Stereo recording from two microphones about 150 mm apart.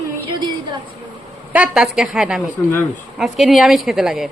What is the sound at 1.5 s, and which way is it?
A woman's voice, 5° right (ahead or behind).